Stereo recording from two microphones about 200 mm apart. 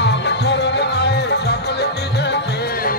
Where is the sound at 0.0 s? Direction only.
60° left (ahead or behind).